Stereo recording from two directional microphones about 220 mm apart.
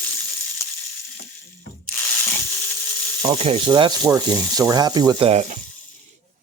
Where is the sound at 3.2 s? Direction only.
25° right (ahead or behind).